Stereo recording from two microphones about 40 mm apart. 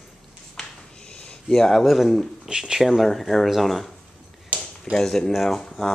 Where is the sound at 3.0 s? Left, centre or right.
Centre.